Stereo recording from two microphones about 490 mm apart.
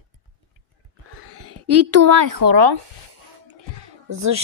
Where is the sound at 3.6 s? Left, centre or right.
Right.